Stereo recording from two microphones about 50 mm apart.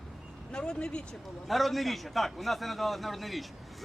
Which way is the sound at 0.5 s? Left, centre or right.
Centre.